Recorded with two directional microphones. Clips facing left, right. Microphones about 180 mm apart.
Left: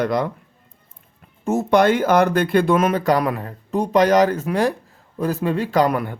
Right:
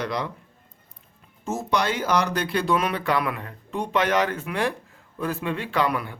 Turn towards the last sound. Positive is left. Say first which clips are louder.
# left 6 dB
turn(degrees=45)  # may be behind; listen again after turning